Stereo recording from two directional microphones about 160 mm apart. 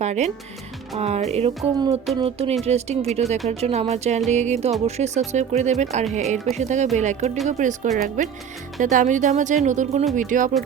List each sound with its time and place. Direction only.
0.0 s speech: 45° right (ahead or behind)
3.3 s speech: centre (ahead or behind)
3.6 s speech: 40° right (ahead or behind)